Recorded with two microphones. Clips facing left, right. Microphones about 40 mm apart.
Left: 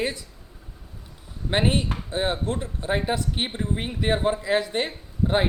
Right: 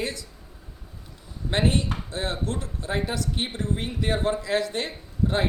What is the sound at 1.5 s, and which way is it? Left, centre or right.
Speech, left.